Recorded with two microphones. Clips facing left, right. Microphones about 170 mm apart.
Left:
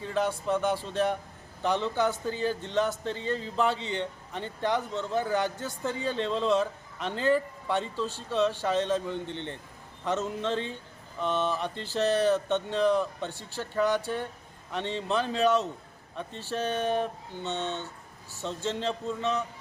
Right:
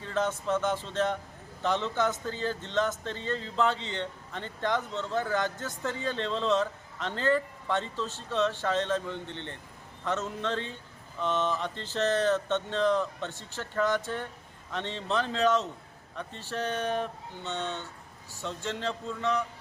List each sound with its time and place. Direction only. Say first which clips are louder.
0.0 s a man's voice: left 1 dB; 15° left (ahead or behind)